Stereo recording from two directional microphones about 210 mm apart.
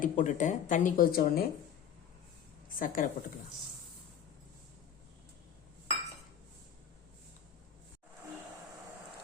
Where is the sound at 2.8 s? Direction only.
40° left (ahead or behind).